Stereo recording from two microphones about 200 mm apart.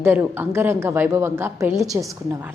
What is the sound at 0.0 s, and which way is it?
A woman's voice, 10° right (ahead or behind).